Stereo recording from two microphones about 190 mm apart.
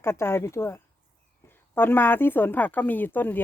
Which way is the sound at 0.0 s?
15° left (ahead or behind).